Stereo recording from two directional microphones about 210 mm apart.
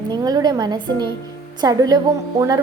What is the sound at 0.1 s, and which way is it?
A woman's voice, 20° right (ahead or behind).